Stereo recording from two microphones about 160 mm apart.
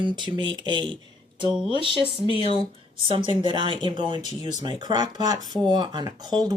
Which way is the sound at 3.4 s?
30° right (ahead or behind).